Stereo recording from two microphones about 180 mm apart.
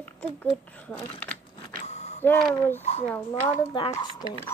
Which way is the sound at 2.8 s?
35° left (ahead or behind).